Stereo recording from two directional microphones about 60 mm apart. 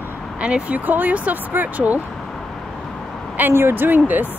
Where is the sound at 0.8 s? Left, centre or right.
Right.